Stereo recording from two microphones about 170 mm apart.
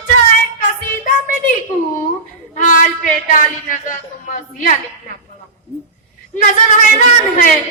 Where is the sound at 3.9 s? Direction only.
50° left (ahead or behind).